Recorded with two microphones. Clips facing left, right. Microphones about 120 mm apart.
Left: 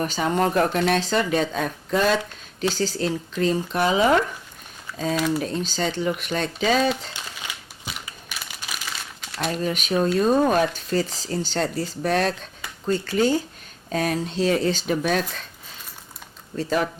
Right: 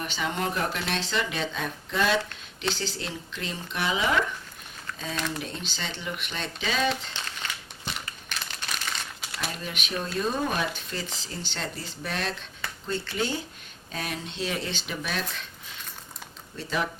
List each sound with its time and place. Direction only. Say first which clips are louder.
0.0 s speech: left 8 dB; 40° left (ahead or behind)
4.9 s a sound: left 6 dB; 5° left (ahead or behind)
5.4 s speech: left 10 dB; 40° left (ahead or behind)
6.8 s crumpling: left 4 dB; 5° left (ahead or behind)
9.5 s speech: left 13 dB; 40° left (ahead or behind)
16.6 s speech: left 7 dB; 45° left (ahead or behind)